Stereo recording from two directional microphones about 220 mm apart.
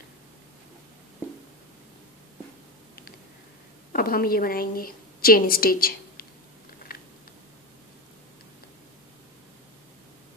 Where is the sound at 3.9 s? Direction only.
40° left (ahead or behind).